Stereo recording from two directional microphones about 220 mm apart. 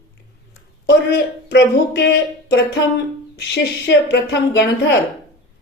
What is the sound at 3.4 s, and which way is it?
Speech, 50° left (ahead or behind).